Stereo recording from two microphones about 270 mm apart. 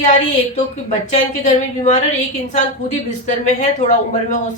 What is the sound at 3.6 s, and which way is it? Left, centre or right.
Speech, left.